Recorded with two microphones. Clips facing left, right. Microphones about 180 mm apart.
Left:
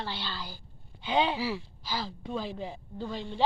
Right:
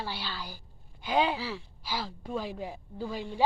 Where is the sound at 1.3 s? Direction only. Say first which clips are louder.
Left 4 dB; 10° left (ahead or behind).